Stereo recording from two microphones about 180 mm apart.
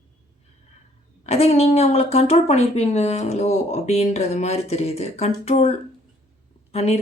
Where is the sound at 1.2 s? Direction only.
35° left (ahead or behind).